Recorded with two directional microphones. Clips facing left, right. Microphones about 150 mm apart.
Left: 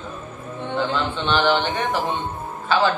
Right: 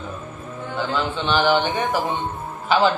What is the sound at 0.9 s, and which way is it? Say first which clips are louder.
Speech: right 4 dB; 10° right (ahead or behind).